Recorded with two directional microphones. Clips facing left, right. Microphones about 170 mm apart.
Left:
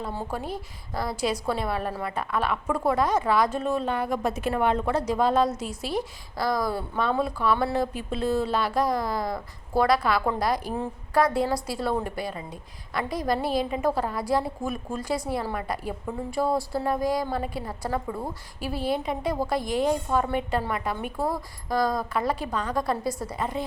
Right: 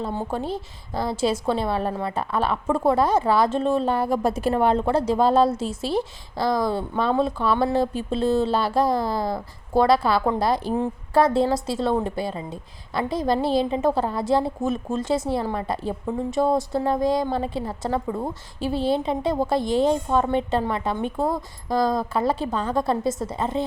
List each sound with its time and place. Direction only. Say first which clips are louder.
0.0 s a woman's voice: right 5 dB; 20° right (ahead or behind)